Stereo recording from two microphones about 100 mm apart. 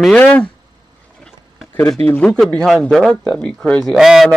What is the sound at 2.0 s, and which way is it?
Speech, 90° right.